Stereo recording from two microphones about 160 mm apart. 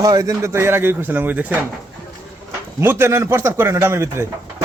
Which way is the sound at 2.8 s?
15° right (ahead or behind).